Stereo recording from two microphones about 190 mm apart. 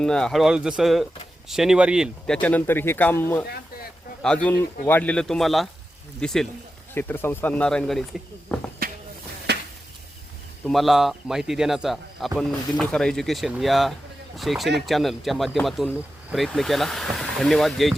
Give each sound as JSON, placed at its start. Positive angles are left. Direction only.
{"t": 0.0, "sound": "speech", "side_deg": 5}
{"t": 4.4, "sound": "speech", "side_deg": 10}
{"t": 8.8, "sound": "a sound", "side_deg": -50}
{"t": 10.7, "sound": "speech", "side_deg": 0}